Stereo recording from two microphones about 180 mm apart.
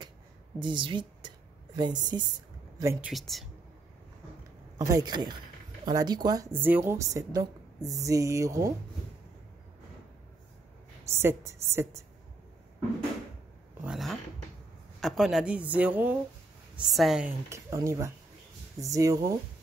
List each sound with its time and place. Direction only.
0.6 s a woman's voice: 25° right (ahead or behind)
3.1 s a woman's voice: centre (ahead or behind)
4.7 s a woman's voice: 20° right (ahead or behind)
11.1 s speech: 15° right (ahead or behind)
13.8 s a sound: centre (ahead or behind)
15.0 s a woman's voice: centre (ahead or behind)
17.5 s speech: 15° right (ahead or behind)